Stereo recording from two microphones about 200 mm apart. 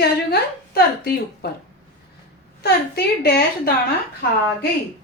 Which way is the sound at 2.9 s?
50° left (ahead or behind).